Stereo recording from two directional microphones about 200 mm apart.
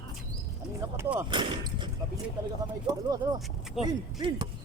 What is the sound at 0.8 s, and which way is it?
Speech, 15° right (ahead or behind).